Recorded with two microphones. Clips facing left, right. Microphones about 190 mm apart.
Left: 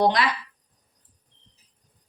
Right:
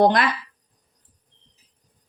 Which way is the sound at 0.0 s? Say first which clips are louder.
Right 4 dB; 50° right (ahead or behind).